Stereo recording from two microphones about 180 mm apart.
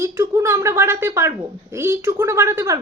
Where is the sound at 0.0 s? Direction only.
15° right (ahead or behind).